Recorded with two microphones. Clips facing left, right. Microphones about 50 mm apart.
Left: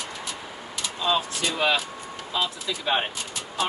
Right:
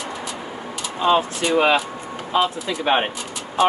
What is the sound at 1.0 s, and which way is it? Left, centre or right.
Speech, right.